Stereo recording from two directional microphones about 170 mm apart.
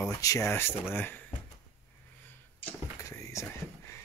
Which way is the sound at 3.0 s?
20° left (ahead or behind).